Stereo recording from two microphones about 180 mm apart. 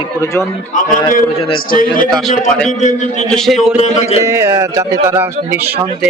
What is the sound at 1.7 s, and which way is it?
A man's voice, 50° left (ahead or behind).